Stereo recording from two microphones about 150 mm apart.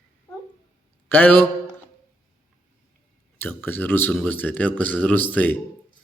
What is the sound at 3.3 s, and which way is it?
Speech, 15° left (ahead or behind).